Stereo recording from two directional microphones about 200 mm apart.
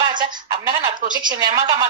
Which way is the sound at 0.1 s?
20° right (ahead or behind).